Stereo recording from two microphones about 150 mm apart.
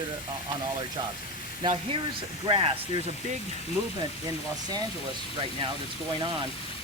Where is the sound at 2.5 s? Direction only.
35° right (ahead or behind).